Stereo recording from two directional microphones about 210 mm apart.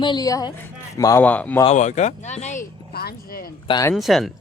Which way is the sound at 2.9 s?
50° left (ahead or behind).